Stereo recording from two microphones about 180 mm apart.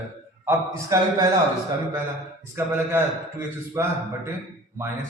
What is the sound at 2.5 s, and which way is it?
A man's voice, 15° right (ahead or behind).